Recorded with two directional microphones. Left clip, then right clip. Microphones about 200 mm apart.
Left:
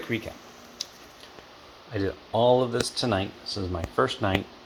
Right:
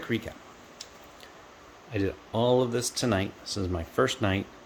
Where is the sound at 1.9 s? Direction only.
10° right (ahead or behind).